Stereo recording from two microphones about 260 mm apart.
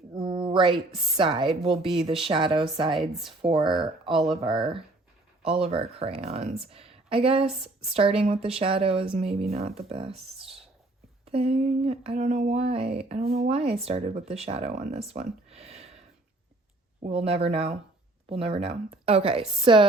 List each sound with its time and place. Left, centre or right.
0.1 s a sound: centre
1.1 s speech: centre
3.0 s speech: centre
3.4 s speech: centre
17.0 s speech: right